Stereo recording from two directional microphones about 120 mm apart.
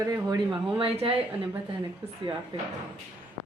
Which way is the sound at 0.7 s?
50° right (ahead or behind).